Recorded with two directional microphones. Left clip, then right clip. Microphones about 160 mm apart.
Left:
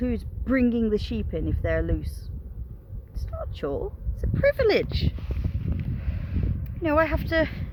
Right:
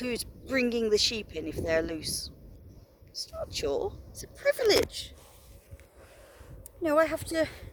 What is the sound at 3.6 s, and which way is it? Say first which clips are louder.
Speech: left 1 dB; 25° right (ahead or behind).